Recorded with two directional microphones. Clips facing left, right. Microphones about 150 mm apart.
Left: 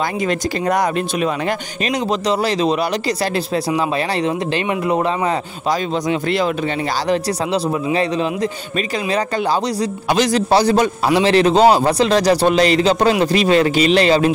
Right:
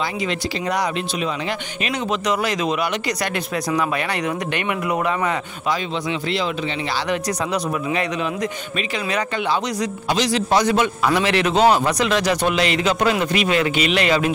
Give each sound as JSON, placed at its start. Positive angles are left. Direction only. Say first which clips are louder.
{"t": 0.3, "sound": "speech", "louder": "left 5 dB", "side_deg": 50}
{"t": 1.9, "sound": "speech", "louder": "left 4 dB", "side_deg": 35}
{"t": 7.1, "sound": "speech", "louder": "left 5 dB", "side_deg": 30}
{"t": 10.0, "sound": "speech", "louder": "left 4 dB", "side_deg": 50}
{"t": 10.5, "sound": "speech", "louder": "left 3 dB", "side_deg": 35}